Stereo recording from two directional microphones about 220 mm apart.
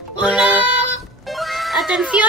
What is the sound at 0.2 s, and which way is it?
Music, 5° right (ahead or behind).